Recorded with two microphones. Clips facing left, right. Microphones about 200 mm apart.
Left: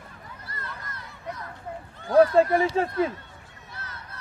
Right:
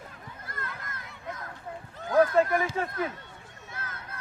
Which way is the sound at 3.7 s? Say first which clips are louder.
Right 1 dB; 50° right (ahead or behind).